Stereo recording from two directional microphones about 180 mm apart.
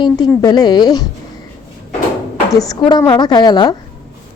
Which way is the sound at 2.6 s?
20° left (ahead or behind).